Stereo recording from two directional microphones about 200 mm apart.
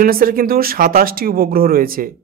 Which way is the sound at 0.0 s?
45° right (ahead or behind).